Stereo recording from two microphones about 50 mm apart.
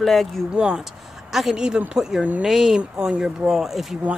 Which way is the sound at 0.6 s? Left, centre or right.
Centre.